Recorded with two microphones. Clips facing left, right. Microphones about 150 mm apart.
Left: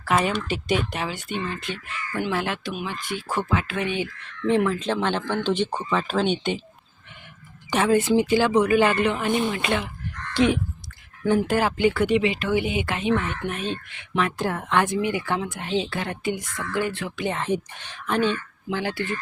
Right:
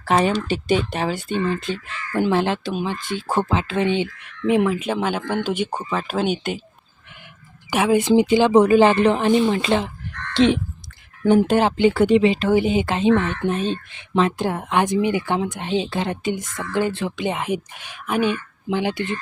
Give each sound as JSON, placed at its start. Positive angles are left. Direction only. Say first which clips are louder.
{"t": 0.4, "sound": "speech", "louder": "right 4 dB", "side_deg": -30}
{"t": 4.2, "sound": "speech", "louder": "even", "side_deg": -15}
{"t": 7.7, "sound": "speech", "louder": "right 3 dB", "side_deg": -10}
{"t": 10.3, "sound": "caw", "louder": "right 4 dB", "side_deg": -25}
{"t": 11.3, "sound": "speech", "louder": "right 5 dB", "side_deg": -25}